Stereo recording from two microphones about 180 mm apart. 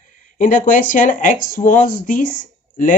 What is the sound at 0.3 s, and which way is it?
Speech, 45° left (ahead or behind).